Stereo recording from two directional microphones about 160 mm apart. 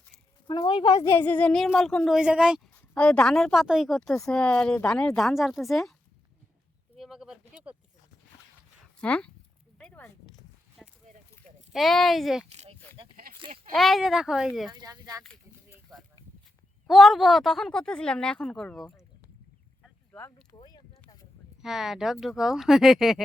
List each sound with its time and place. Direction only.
0.4 s speech: 30° left (ahead or behind); by 2.6 s 5° right (ahead or behind)
2.9 s speech: 5° left (ahead or behind)
6.9 s a sound: centre (ahead or behind)
8.8 s a sound: 10° left (ahead or behind)
11.7 s speech: centre (ahead or behind)
12.9 s a sound: 10° left (ahead or behind)
13.7 s speech: centre (ahead or behind)
14.7 s speech: 25° right (ahead or behind)
16.8 s speech: centre (ahead or behind)
20.1 s speech: 15° left (ahead or behind)
21.6 s speech: centre (ahead or behind)